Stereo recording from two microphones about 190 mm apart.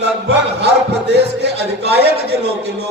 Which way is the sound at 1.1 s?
60° right (ahead or behind).